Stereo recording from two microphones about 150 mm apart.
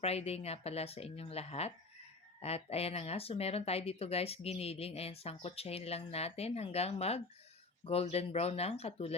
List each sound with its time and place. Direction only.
0.0 s speech: 45° left (ahead or behind)